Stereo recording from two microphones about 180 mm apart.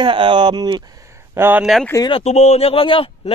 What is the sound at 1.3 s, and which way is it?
Speech, 10° right (ahead or behind).